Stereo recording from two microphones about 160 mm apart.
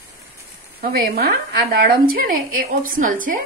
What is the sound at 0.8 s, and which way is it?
Speech, 65° right (ahead or behind).